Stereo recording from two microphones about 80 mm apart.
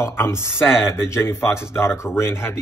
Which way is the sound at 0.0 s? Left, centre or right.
Left.